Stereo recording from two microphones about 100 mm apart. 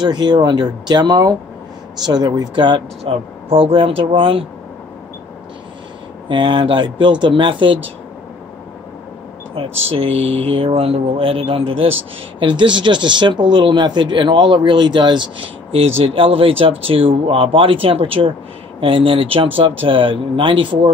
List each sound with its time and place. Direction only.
0.0 s speech: 45° right (ahead or behind)
3.0 s speech: 80° right; by 4.5 s 60° right (ahead or behind)
6.2 s speech: 55° right (ahead or behind)
9.8 s speech: 70° right (ahead or behind)
12.4 s speech: 55° right (ahead or behind)